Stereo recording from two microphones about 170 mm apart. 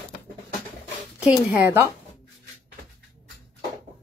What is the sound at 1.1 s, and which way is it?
Speech, 10° right (ahead or behind).